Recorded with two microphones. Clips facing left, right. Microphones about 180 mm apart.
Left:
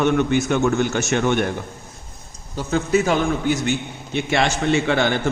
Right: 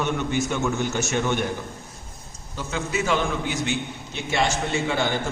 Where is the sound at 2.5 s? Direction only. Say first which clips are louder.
Left 8 dB; 40° left (ahead or behind).